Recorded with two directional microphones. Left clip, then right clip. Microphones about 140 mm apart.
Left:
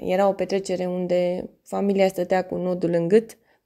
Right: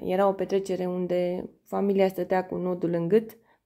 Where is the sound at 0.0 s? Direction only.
30° left (ahead or behind).